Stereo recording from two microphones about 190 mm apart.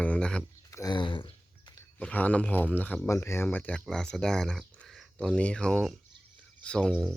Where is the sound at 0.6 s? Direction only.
15° left (ahead or behind).